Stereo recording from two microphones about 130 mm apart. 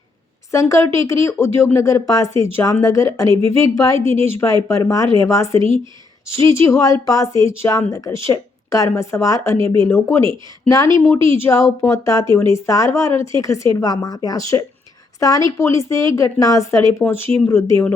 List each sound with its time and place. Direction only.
0.5 s speech: 25° left (ahead or behind)